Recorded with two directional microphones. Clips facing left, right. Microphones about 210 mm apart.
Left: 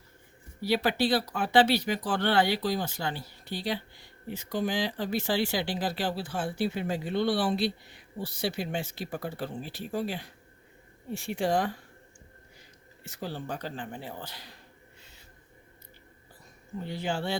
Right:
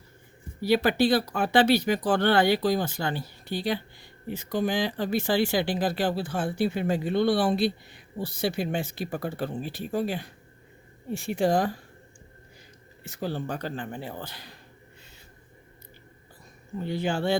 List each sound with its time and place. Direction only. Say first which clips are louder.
0.6 s speech: right 4 dB; 50° right (ahead or behind)
13.1 s speech: right 5 dB; 55° right (ahead or behind)
16.9 s speech: right 5 dB; 55° right (ahead or behind)